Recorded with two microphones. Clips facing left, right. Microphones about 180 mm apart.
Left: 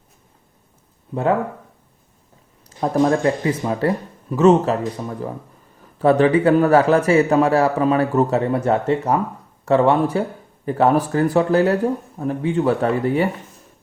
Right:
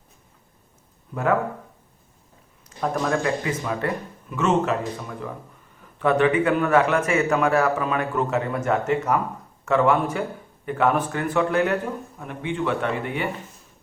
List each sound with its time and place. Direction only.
1.1 s speech: 30° left (ahead or behind)
2.6 s speech: 30° left (ahead or behind)